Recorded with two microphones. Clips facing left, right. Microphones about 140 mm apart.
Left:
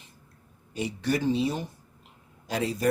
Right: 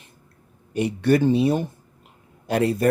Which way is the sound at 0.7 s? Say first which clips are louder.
Right 9 dB; 60° right (ahead or behind).